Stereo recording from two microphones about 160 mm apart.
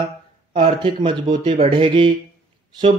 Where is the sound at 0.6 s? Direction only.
35° right (ahead or behind).